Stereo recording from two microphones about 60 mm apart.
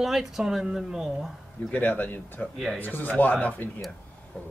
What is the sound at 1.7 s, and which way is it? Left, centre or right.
Speech, left.